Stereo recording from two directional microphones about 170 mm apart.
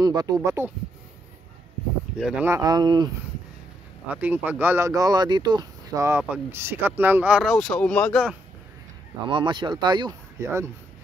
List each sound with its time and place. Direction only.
0.0 s speech: 25° right (ahead or behind)
2.1 s speech: centre (ahead or behind)
2.4 s speech: 20° right (ahead or behind)
4.1 s speech: 10° right (ahead or behind)
7.5 s speech: 5° left (ahead or behind)
9.3 s speech: 30° right (ahead or behind)